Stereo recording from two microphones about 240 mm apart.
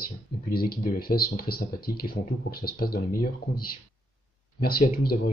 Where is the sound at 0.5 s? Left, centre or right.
Left.